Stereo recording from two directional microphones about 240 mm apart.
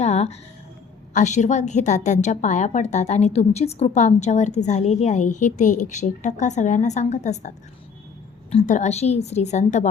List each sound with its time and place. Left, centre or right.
0.0 s a woman's voice: left